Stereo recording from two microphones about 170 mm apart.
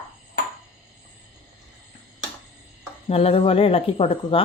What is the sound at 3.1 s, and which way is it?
Speech, 35° left (ahead or behind).